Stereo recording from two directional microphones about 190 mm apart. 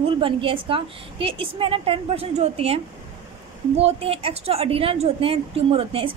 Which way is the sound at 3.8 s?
30° right (ahead or behind).